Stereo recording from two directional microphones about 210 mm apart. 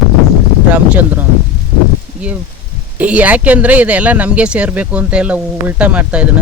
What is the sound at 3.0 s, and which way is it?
Speech, 5° right (ahead or behind).